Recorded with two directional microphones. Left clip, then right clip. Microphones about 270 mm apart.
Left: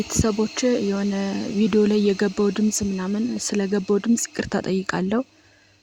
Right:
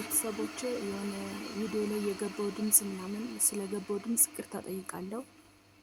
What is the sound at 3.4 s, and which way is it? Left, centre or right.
Speech, right.